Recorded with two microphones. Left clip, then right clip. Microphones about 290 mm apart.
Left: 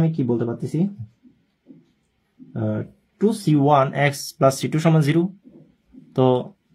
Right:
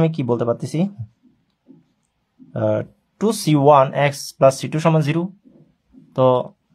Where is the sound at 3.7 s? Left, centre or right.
Centre.